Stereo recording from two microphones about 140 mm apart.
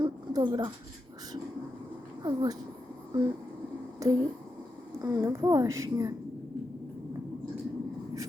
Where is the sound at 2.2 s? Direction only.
30° right (ahead or behind).